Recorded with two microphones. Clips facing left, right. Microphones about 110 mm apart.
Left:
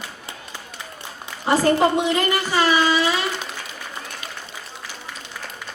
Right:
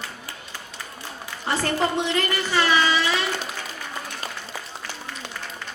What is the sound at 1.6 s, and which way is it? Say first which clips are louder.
Speech: left 6 dB; 10° left (ahead or behind).